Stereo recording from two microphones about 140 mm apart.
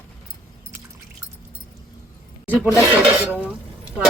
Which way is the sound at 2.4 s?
10° right (ahead or behind).